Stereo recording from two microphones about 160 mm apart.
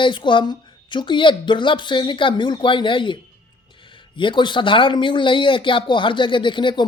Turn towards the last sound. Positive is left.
turn(degrees=30)  # may be behind; listen again after turning